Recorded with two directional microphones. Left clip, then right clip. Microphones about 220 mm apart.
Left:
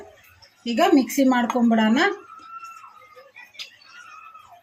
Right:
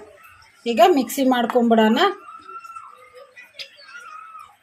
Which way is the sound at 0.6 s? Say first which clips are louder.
Right 4 dB; 35° right (ahead or behind).